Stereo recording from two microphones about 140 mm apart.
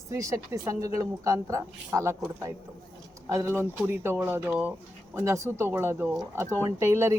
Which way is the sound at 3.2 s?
20° right (ahead or behind).